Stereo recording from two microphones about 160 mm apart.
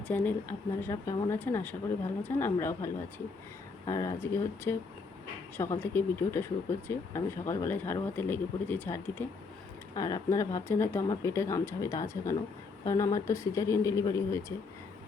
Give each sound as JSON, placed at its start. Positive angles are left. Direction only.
{"t": 0.1, "sound": "speech", "side_deg": 10}